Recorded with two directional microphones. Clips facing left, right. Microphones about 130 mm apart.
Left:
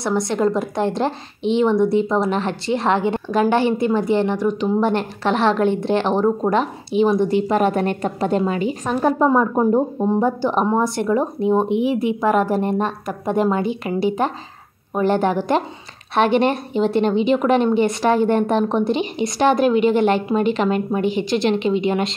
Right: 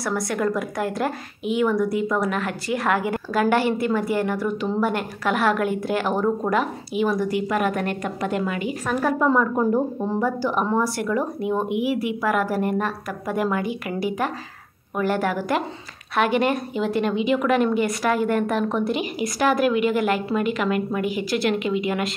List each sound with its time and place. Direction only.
0.0 s a woman's voice: 25° left (ahead or behind)